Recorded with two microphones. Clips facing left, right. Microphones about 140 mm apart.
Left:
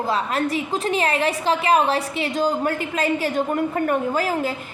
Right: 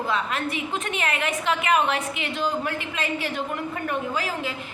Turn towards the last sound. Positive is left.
turn(degrees=45)  # may be behind; listen again after turning